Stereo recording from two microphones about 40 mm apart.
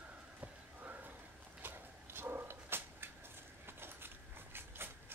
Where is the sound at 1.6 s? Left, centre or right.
Right.